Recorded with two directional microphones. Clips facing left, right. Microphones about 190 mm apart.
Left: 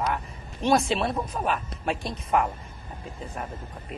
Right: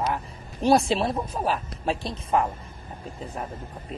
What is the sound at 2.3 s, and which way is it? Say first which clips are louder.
Speech: right 1 dB; 30° right (ahead or behind).